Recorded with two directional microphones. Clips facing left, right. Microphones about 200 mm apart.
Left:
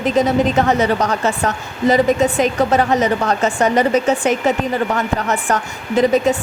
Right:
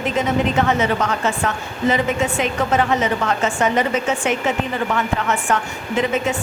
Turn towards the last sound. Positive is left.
turn(degrees=35)  # may be behind; listen again after turning